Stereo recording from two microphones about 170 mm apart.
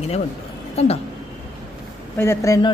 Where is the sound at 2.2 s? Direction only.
15° left (ahead or behind).